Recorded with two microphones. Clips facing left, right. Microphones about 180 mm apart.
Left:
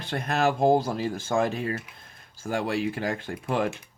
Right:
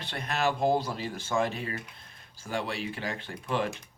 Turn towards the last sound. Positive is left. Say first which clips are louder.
# left 4 dB
turn(degrees=50)  # may be behind; listen again after turning